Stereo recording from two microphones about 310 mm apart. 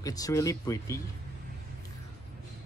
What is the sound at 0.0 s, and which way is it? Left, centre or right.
Speech, centre.